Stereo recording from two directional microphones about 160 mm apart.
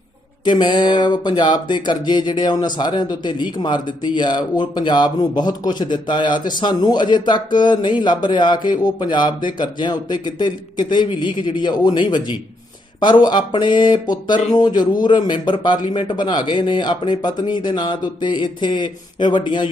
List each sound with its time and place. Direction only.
0.5 s speech: 30° left (ahead or behind)